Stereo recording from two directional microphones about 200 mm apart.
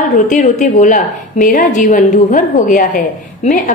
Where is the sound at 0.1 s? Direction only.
40° left (ahead or behind).